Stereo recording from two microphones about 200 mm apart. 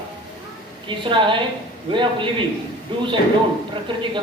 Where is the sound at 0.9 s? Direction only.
25° right (ahead or behind).